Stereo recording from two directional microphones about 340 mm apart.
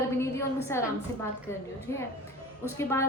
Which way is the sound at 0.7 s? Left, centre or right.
Centre.